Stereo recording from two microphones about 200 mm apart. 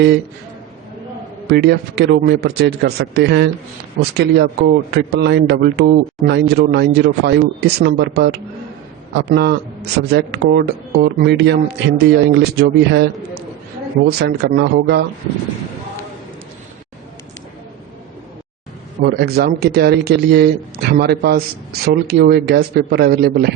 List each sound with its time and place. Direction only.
1.5 s a man's voice: 55° right (ahead or behind)
14.2 s speech: 55° right (ahead or behind)
19.0 s speech: 55° right (ahead or behind)